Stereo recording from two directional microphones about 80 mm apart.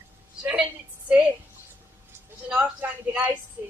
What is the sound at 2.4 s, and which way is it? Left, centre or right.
Speech, centre.